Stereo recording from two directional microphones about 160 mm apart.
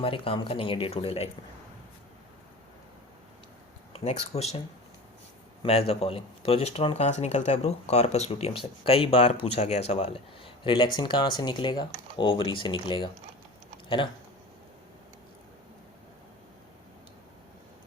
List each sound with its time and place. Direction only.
0.0 s speech: 35° left (ahead or behind)
4.0 s speech: 45° left (ahead or behind)
5.9 s speech: 40° left (ahead or behind)